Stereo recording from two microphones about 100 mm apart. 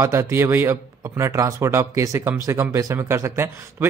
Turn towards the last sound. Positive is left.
turn(degrees=-25)  # may be behind; listen again after turning